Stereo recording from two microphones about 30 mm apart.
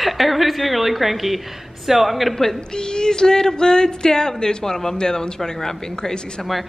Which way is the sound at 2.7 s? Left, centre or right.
Left.